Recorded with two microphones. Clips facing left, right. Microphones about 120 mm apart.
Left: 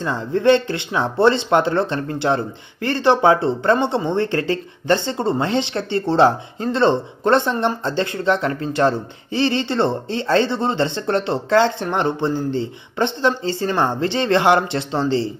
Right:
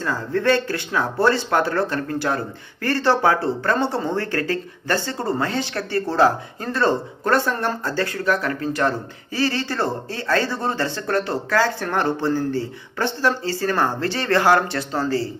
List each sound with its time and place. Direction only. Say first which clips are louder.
0.0 s speech: left 4 dB; 20° left (ahead or behind)